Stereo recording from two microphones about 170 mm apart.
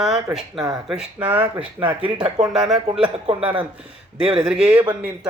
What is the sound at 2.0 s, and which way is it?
Speech, 30° right (ahead or behind).